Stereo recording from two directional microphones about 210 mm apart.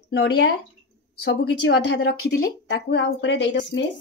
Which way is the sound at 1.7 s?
55° left (ahead or behind).